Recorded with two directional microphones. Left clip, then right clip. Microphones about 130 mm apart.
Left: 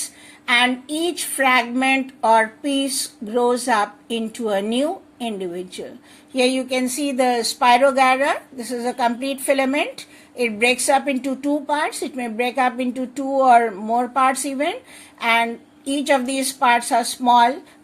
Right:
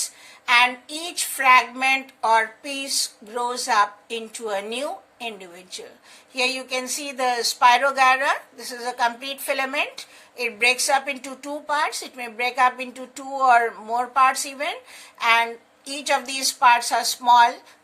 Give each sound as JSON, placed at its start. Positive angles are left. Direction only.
{"t": 0.4, "sound": "speech", "side_deg": 25}